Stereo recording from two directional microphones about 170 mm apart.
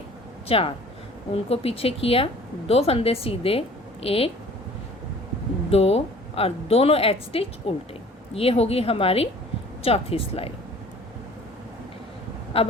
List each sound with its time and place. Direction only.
0.4 s a woman's voice: 35° left (ahead or behind)
5.7 s speech: 35° left (ahead or behind)
12.5 s speech: 35° left (ahead or behind)